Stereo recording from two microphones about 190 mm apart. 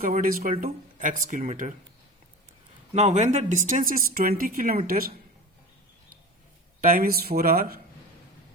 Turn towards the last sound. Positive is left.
turn(degrees=-50)  # may be behind; listen again after turning